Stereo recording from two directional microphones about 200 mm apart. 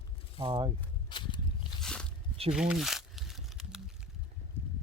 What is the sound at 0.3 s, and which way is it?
Speech, 25° right (ahead or behind).